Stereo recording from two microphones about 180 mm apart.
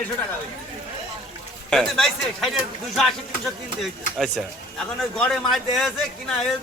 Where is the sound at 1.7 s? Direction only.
Centre (ahead or behind).